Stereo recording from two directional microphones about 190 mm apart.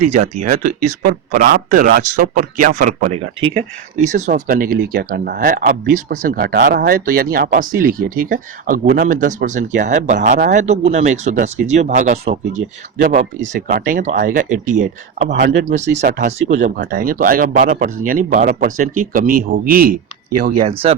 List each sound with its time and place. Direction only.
0.1 s speech: 40° right (ahead or behind)
15.3 s speech: 65° right (ahead or behind)
16.0 s speech: 50° right (ahead or behind)